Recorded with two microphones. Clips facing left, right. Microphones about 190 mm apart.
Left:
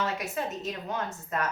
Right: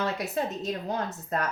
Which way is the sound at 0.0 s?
35° right (ahead or behind).